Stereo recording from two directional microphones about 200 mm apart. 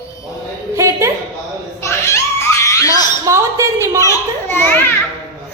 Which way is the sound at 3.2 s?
15° right (ahead or behind).